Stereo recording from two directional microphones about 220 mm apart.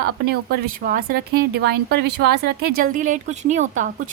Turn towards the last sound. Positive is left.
turn(degrees=-35)  # may be behind; listen again after turning